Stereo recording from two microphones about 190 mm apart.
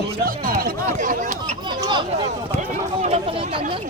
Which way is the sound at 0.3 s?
50° right (ahead or behind).